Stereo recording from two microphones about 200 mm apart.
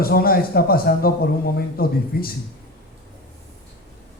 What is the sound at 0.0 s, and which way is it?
A man's voice, 50° left (ahead or behind).